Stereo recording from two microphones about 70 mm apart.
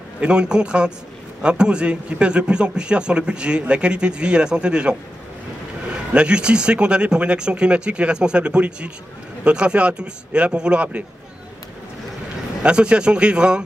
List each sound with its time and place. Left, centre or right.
0.2 s a man's voice: centre
6.1 s a man's voice: centre
12.6 s a man's voice: centre